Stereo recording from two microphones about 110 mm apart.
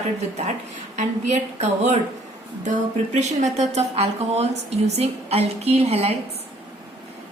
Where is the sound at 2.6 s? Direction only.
90° right; by 6.1 s 65° right (ahead or behind).